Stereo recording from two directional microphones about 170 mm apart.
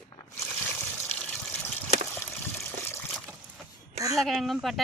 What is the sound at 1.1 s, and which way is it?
Gush, 10° left (ahead or behind).